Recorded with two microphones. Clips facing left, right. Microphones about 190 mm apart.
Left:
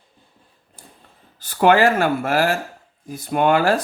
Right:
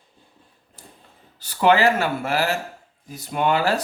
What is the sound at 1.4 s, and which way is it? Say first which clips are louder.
Speech: left 3 dB; 50° left (ahead or behind).